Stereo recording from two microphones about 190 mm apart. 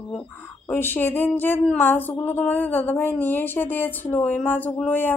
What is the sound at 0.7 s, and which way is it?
Speech, 10° left (ahead or behind).